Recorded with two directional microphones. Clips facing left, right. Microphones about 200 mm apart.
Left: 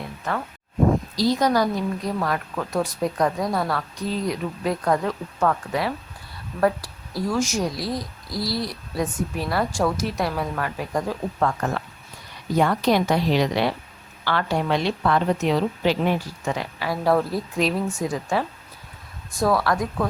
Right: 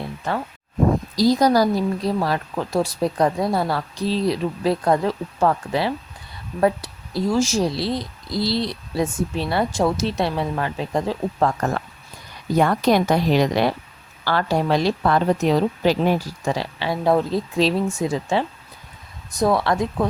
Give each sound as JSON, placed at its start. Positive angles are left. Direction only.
{"t": 1.1, "sound": "a woman's voice", "side_deg": -40}
{"t": 12.5, "sound": "a woman's voice", "side_deg": -50}